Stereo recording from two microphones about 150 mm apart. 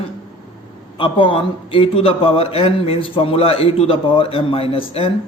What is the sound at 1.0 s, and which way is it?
A man's voice, 35° left (ahead or behind).